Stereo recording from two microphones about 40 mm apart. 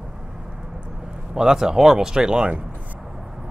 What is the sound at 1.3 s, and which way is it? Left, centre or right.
Speech, centre.